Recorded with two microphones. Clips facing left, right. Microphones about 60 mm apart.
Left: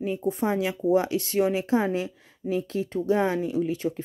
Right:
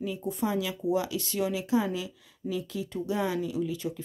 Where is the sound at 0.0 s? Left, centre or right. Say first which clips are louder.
Left 5 dB; left.